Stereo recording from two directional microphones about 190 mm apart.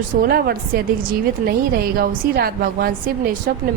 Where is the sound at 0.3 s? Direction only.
55° right (ahead or behind).